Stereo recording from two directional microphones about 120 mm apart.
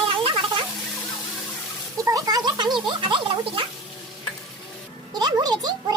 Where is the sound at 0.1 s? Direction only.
45° right (ahead or behind).